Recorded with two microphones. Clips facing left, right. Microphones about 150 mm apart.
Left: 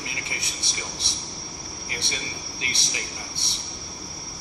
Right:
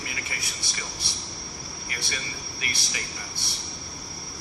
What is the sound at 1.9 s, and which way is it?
A man's voice, 20° left (ahead or behind).